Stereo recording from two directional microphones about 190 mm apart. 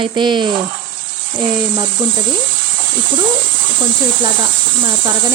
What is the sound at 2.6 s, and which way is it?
Hiss, 75° right (ahead or behind).